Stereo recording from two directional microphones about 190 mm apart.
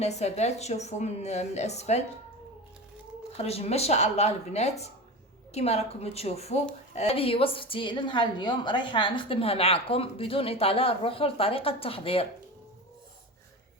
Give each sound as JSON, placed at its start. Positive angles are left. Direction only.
{"t": 0.0, "sound": "a woman's voice", "side_deg": 35}
{"t": 3.3, "sound": "a woman's voice", "side_deg": 35}